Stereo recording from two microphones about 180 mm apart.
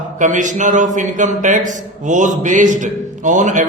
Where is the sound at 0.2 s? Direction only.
45° right (ahead or behind).